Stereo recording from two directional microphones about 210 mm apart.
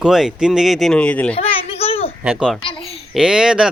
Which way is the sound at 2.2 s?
Centre (ahead or behind).